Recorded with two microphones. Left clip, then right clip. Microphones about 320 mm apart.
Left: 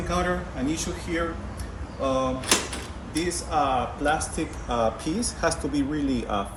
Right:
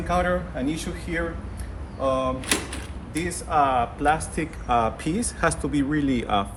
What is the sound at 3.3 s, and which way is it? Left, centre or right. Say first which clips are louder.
Speech: right 3 dB; centre.